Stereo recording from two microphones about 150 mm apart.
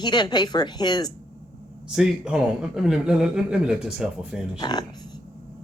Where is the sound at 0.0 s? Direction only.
30° left (ahead or behind).